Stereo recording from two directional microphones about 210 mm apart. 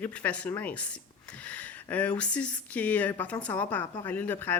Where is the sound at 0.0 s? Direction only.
10° left (ahead or behind).